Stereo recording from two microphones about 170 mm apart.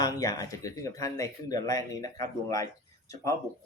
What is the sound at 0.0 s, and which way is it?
Speech, 20° left (ahead or behind).